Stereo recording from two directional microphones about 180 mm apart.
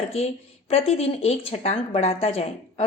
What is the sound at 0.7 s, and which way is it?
A woman's voice, 35° left (ahead or behind).